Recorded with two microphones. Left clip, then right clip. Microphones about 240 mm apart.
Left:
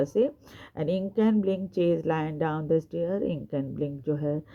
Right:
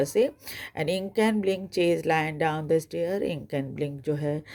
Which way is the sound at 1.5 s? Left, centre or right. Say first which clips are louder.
Right 1 dB; centre.